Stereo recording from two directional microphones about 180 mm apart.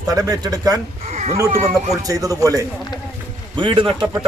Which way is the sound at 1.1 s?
40° right (ahead or behind).